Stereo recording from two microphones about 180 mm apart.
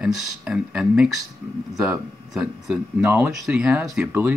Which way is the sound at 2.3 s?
5° right (ahead or behind).